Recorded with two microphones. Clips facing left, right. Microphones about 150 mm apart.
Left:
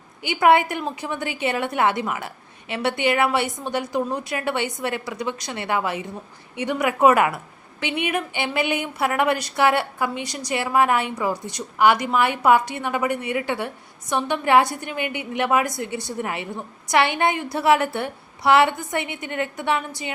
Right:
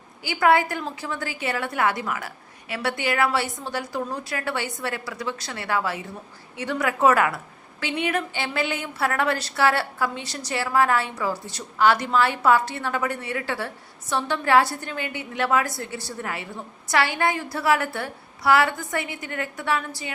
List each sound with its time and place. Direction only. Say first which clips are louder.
0.2 s a woman's voice: left 3 dB; 20° left (ahead or behind)